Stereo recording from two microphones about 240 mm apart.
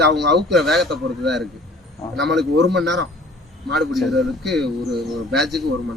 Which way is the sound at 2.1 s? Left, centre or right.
Right.